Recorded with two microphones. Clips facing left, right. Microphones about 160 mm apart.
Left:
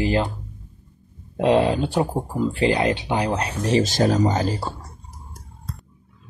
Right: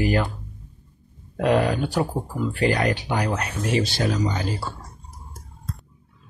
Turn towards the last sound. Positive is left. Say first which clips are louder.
# left 5 dB
turn(degrees=40)  # may be behind; listen again after turning